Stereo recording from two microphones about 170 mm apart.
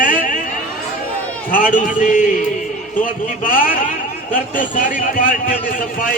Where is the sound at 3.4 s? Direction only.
55° left (ahead or behind).